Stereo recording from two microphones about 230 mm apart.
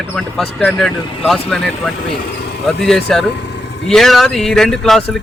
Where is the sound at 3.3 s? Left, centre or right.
Left.